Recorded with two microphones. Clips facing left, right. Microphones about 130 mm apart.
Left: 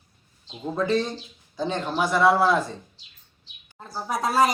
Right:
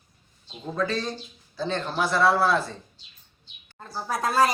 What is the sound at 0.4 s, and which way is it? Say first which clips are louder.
A man's voice: left 2 dB; 20° left (ahead or behind).